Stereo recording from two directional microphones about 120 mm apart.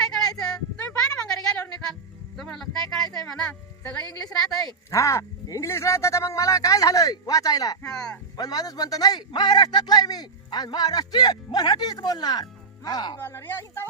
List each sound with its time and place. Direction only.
0.3 s a sound: 5° left (ahead or behind)
2.3 s music: centre (ahead or behind)
4.5 s speech: 30° left (ahead or behind)
7.8 s speech: 5° left (ahead or behind)
8.4 s a man's voice: 30° left (ahead or behind)
13.1 s speech: 20° left (ahead or behind)